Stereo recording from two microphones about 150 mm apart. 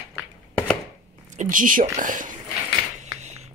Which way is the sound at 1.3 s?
60° right (ahead or behind).